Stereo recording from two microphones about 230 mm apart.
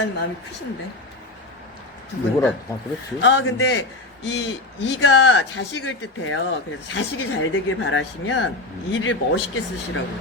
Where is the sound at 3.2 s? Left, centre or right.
Left.